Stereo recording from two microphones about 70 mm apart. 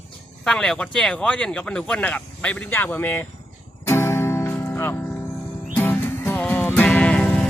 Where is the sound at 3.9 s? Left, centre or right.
Left; by 7.4 s centre.